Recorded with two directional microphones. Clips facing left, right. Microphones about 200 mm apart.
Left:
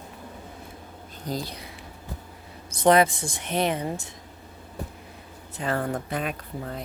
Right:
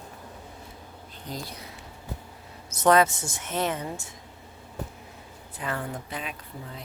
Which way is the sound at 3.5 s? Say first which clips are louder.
Left 3 dB; 15° left (ahead or behind).